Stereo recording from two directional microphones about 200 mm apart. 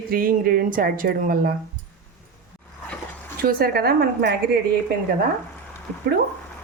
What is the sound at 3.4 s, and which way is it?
Speech, 50° right (ahead or behind).